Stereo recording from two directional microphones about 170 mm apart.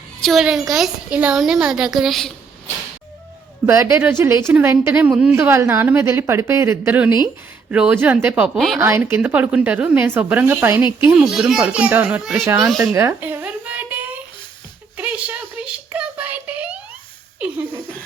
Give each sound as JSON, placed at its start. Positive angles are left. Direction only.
{"t": 0.2, "sound": "a woman's voice", "side_deg": 0}
{"t": 3.7, "sound": "a woman's voice", "side_deg": -15}
{"t": 8.8, "sound": "a woman's voice", "side_deg": -15}
{"t": 12.8, "sound": "a sound", "side_deg": -15}
{"t": 14.9, "sound": "child singing", "side_deg": -10}